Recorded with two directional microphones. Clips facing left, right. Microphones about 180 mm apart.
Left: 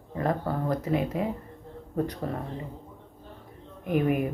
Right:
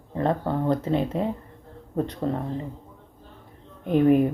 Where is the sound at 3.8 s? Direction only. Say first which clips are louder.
Right 7 dB; 30° right (ahead or behind).